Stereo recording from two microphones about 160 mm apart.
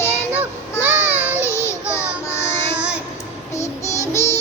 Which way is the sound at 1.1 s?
10° right (ahead or behind).